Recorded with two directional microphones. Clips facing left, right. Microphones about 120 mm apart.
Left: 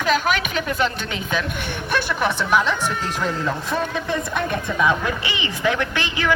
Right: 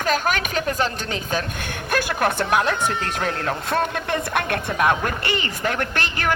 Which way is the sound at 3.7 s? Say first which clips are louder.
Right 3 dB; 60° right (ahead or behind).